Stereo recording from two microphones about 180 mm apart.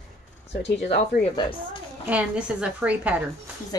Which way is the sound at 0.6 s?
70° left (ahead or behind).